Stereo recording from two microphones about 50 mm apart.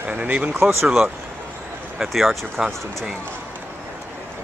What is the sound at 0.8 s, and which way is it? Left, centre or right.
Speech, centre.